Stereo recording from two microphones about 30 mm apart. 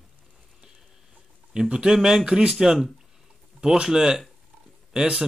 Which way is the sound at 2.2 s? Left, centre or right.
Right.